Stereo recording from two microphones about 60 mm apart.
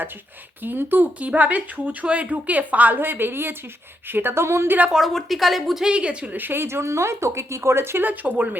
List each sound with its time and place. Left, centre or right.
0.6 s a woman's voice: right
4.9 s speech: centre
5.8 s speech: centre
6.3 s a woman's voice: right